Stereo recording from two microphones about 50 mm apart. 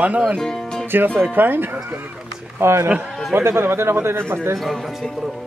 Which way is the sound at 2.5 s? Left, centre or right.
Right.